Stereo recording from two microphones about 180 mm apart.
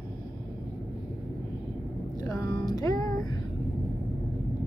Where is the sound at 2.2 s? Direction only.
20° left (ahead or behind).